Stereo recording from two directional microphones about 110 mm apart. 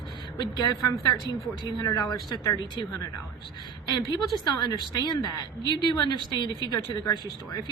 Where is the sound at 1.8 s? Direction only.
40° left (ahead or behind).